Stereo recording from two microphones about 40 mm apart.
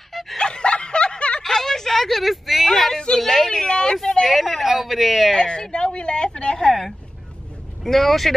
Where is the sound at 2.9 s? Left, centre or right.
Centre.